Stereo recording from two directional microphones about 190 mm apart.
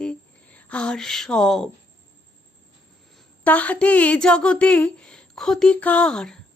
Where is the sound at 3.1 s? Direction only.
10° left (ahead or behind).